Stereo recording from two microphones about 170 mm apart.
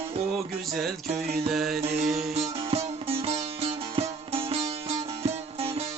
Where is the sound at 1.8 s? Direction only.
40° right (ahead or behind).